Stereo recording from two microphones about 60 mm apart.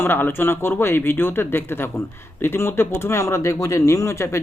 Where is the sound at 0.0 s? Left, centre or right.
Left.